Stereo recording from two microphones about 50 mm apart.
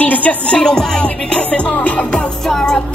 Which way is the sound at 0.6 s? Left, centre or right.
Centre.